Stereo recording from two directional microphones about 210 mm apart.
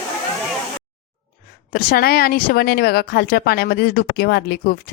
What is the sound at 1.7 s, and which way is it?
Speech, 45° left (ahead or behind).